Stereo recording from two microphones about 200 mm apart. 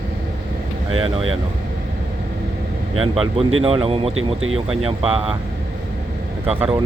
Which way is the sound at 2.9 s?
30° right (ahead or behind).